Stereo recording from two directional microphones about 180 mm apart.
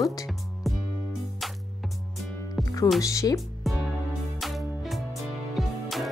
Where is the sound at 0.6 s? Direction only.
Centre (ahead or behind).